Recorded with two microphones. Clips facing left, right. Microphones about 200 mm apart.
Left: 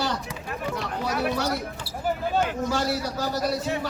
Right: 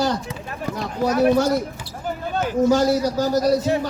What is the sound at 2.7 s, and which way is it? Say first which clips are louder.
A man's voice: right 9 dB; 45° right (ahead or behind).